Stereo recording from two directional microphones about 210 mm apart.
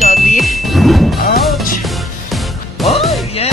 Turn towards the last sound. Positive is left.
turn(degrees=0)  # may be behind; listen again after turning